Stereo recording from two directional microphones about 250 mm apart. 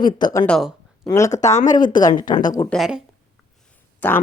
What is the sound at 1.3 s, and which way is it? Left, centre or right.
Speech, left.